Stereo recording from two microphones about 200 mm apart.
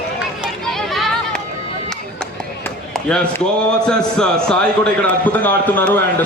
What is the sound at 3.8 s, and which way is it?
A man's voice, 5° left (ahead or behind).